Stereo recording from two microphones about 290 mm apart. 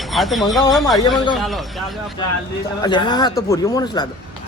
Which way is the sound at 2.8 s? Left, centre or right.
Centre.